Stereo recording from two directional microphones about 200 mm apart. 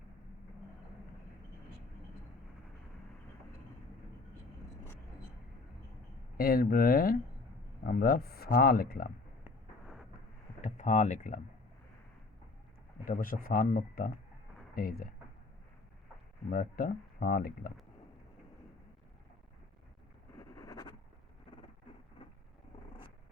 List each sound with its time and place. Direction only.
6.3 s speech: 45° left (ahead or behind)
9.8 s a sound: centre (ahead or behind)
10.6 s speech: 35° left (ahead or behind)
13.1 s speech: 45° left (ahead or behind)
16.5 s speech: 45° left (ahead or behind)
20.4 s a sound: 15° left (ahead or behind)